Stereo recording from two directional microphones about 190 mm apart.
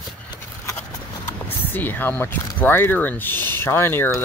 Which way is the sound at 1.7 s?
10° left (ahead or behind).